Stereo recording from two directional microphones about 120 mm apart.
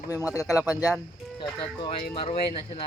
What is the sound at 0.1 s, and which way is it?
Speech, 15° right (ahead or behind).